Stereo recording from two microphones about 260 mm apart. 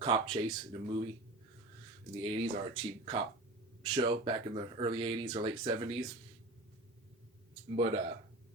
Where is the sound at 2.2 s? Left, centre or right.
Right.